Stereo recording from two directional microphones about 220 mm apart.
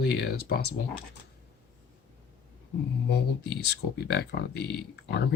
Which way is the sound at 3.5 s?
50° left (ahead or behind).